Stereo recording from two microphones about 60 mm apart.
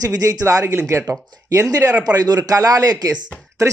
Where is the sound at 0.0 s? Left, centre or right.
Right.